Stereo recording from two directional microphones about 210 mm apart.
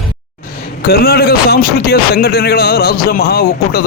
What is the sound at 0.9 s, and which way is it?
A man's voice, 45° left (ahead or behind).